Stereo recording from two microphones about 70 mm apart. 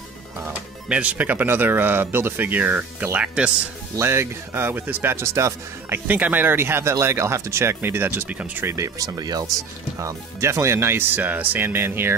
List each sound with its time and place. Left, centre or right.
0.5 s speech: centre
4.0 s speech: right
6.0 s speech: right
8.6 s speech: right
9.9 s speech: right
11.1 s speech: right